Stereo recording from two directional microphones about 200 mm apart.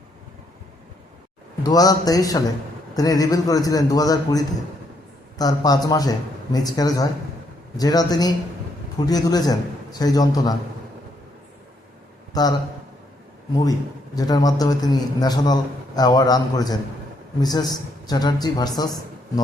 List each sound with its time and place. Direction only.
1.6 s a man's voice: 20° left (ahead or behind)
12.3 s a man's voice: 20° left (ahead or behind)